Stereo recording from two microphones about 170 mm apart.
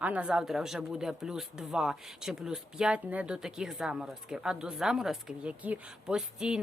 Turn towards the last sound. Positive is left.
turn(degrees=-5)  # may be behind; listen again after turning